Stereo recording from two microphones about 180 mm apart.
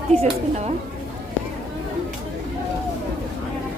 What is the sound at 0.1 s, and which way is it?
Speech, 35° right (ahead or behind).